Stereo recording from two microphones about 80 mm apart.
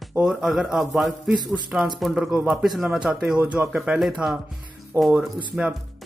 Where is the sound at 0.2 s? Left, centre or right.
Centre.